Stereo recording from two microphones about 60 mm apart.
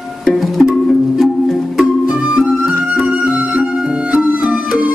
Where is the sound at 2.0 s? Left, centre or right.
Centre.